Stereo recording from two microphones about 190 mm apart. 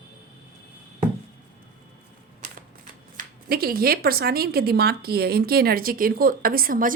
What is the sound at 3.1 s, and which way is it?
Speech, 55° right (ahead or behind).